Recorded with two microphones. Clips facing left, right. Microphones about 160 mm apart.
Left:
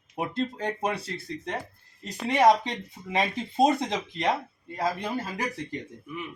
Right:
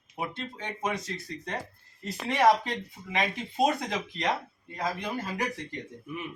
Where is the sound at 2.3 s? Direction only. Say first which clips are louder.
Left 2 dB; 20° left (ahead or behind).